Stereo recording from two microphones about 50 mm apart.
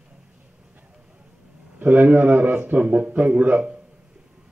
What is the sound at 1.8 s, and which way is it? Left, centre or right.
A man's voice, right.